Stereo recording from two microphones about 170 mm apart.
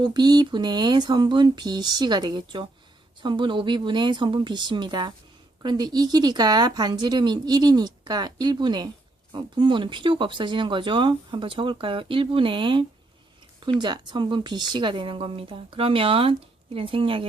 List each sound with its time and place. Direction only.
0.0 s a woman's voice: 25° right (ahead or behind)